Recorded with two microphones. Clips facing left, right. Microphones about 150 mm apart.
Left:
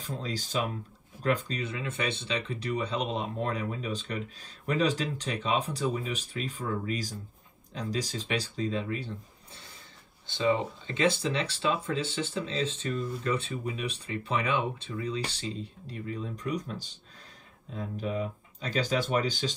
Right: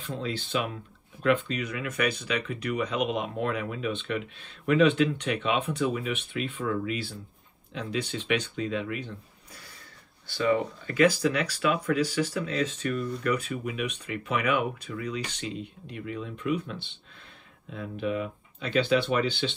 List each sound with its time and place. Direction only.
0.0 s speech: 40° left (ahead or behind)